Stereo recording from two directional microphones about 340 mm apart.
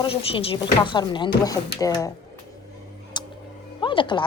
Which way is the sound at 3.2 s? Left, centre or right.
Centre.